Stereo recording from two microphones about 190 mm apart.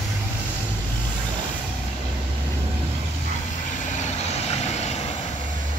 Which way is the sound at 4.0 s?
35° left (ahead or behind).